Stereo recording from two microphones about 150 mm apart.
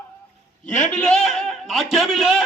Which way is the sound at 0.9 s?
5° left (ahead or behind).